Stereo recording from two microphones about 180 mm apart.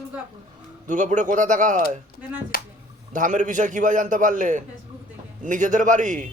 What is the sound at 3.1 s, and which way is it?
A man's voice, 45° right (ahead or behind).